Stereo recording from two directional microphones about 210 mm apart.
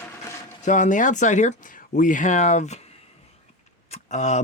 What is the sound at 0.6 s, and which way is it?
Speech, 35° left (ahead or behind).